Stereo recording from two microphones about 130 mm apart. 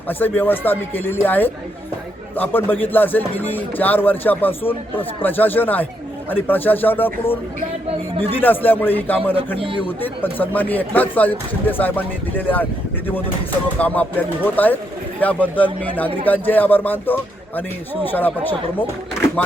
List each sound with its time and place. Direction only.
0.1 s a man's voice: 15° left (ahead or behind)
8.2 s a man's voice: 15° left (ahead or behind)
9.6 s a man's voice: 45° right (ahead or behind)
10.0 s a man's voice: 15° left (ahead or behind)
13.7 s a man's voice: 10° left (ahead or behind)